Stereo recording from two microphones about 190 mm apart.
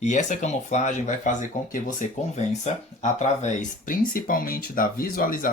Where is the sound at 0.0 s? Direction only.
40° left (ahead or behind).